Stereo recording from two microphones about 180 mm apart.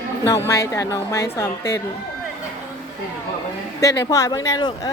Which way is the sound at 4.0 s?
20° left (ahead or behind).